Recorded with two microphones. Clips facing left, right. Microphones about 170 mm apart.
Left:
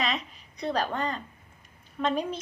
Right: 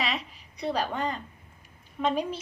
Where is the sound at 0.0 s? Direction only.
10° right (ahead or behind).